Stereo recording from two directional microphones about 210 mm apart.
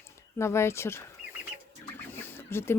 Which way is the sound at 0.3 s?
10° left (ahead or behind).